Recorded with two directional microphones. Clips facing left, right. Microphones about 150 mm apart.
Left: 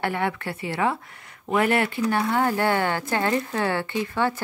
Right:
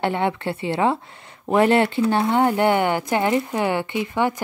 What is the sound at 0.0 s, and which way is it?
Speech, 25° right (ahead or behind).